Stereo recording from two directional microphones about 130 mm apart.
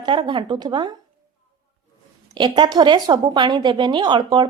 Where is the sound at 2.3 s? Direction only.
35° right (ahead or behind).